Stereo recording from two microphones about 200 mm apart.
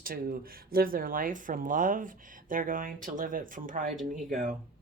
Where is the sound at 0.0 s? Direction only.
45° right (ahead or behind).